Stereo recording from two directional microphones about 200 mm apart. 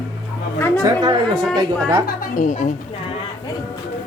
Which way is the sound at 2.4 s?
40° left (ahead or behind).